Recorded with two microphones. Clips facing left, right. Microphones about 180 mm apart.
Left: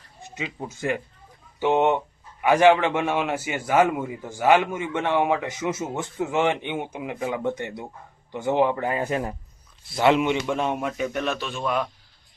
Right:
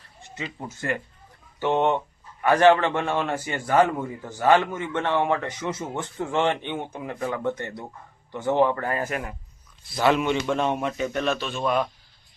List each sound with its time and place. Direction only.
0.2 s a man's voice: 10° left (ahead or behind)
10.4 s a man's voice: 5° left (ahead or behind)